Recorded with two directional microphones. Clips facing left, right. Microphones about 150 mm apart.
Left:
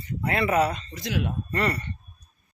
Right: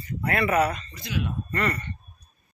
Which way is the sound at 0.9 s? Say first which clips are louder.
Left 2 dB; 85° left.